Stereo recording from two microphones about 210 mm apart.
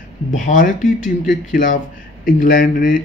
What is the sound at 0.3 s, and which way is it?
Speech, 40° left (ahead or behind).